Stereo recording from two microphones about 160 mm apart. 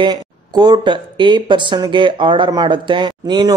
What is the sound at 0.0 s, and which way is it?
Speech, 30° right (ahead or behind).